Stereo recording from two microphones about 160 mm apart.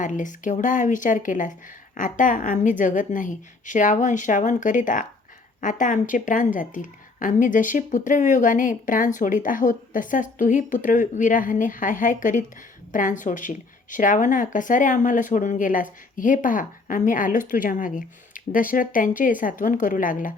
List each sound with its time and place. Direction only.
0.0 s a woman's voice: 50° left (ahead or behind)